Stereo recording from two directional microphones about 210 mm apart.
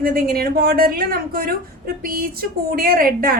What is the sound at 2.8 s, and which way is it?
Speech, 45° right (ahead or behind).